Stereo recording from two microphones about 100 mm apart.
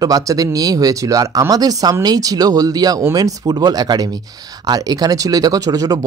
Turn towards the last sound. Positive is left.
turn(degrees=-35)  # may be behind; listen again after turning